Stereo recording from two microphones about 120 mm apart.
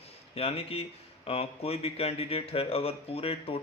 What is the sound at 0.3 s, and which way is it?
Speech, 55° left (ahead or behind).